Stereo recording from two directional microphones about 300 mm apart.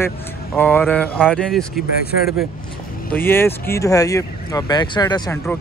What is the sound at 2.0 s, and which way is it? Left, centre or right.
Speech, left.